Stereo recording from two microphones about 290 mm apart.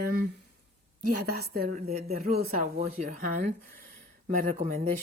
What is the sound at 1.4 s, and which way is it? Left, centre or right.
Speech, right.